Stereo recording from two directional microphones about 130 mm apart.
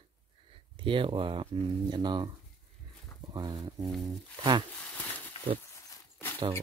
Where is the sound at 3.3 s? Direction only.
30° right (ahead or behind).